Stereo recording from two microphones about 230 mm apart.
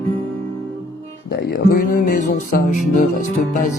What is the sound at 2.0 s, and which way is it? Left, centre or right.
Speech, left.